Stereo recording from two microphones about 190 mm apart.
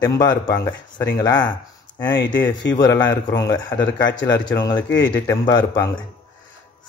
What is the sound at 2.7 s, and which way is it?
A man's voice, 20° left (ahead or behind).